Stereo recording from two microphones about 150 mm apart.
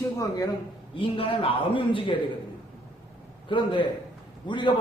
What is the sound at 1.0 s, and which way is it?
A man's voice, 35° left (ahead or behind).